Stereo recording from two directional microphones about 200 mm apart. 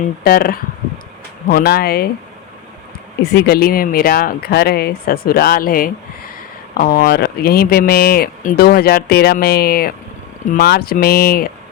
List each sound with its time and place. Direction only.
0.3 s speech: 50° left (ahead or behind)
3.3 s speech: 50° left (ahead or behind)